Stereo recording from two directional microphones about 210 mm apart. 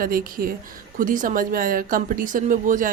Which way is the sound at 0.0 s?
45° right (ahead or behind).